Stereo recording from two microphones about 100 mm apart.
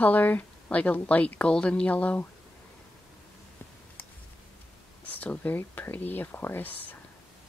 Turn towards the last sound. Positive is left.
turn(degrees=15)  # may be behind; listen again after turning